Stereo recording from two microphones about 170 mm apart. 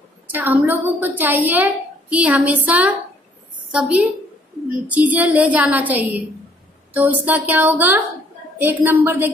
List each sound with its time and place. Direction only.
0.3 s a woman's voice: 10° right (ahead or behind)